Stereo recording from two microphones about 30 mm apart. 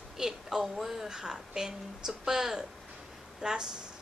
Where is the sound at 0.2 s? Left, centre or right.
Centre.